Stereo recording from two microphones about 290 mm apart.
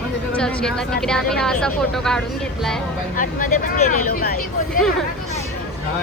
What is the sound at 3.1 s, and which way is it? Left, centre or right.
Speech, left.